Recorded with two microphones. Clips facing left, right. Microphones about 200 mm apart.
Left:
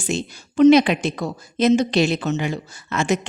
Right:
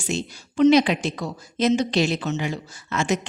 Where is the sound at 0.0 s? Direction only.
50° left (ahead or behind).